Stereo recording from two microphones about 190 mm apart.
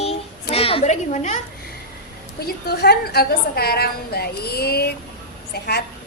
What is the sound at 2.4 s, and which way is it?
A woman's voice, 60° left (ahead or behind).